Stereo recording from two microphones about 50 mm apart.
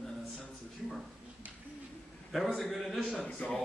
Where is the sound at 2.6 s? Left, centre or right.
Centre.